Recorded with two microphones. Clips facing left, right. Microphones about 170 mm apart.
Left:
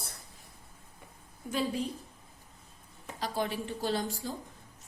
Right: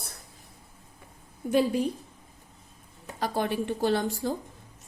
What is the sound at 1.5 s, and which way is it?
Speech, 60° right (ahead or behind).